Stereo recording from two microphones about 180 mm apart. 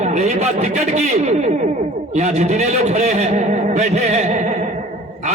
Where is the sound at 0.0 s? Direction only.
40° right (ahead or behind).